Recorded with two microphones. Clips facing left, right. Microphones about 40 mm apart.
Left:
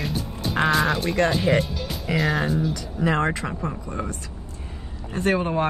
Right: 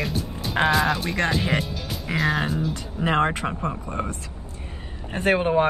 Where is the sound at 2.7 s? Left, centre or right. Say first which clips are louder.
Right 1 dB; right.